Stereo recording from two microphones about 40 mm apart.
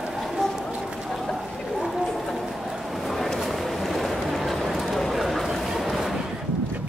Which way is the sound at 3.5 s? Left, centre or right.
Centre.